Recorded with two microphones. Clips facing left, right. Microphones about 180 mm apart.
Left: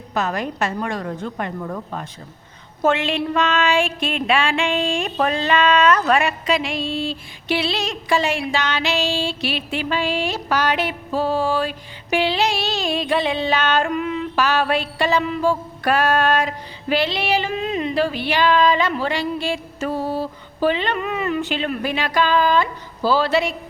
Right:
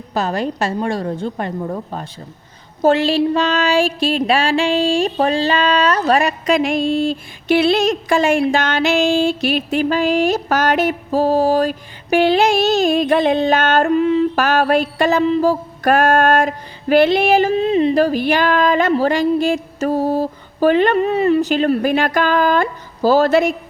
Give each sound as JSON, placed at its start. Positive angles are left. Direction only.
{"t": 0.1, "sound": "a woman's voice", "side_deg": -30}
{"t": 2.8, "sound": "music", "side_deg": -35}
{"t": 13.9, "sound": "a woman's voice", "side_deg": -30}
{"t": 14.3, "sound": "music", "side_deg": -50}
{"t": 15.2, "sound": "music", "side_deg": -35}
{"t": 17.5, "sound": "music", "side_deg": -30}